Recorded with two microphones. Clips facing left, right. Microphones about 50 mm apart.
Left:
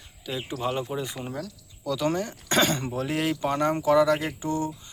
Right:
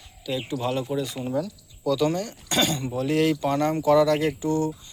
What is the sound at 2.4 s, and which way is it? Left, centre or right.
Speech, left.